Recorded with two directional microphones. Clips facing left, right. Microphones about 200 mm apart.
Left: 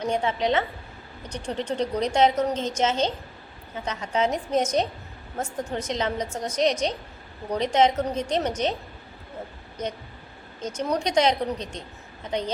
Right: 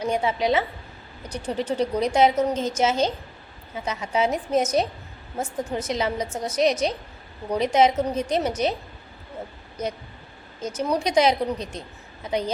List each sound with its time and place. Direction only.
0.0 s a woman's voice: 10° right (ahead or behind)
10.8 s a woman's voice: 5° right (ahead or behind)